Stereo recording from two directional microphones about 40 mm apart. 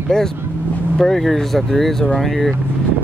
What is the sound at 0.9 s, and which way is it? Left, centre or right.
Speech, centre.